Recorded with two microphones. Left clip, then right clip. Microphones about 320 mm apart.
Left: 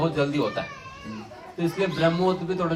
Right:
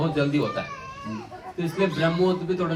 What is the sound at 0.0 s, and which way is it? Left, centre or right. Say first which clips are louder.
Speech: even; centre.